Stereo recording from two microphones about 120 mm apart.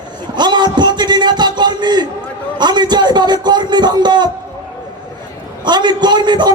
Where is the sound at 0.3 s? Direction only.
35° right (ahead or behind).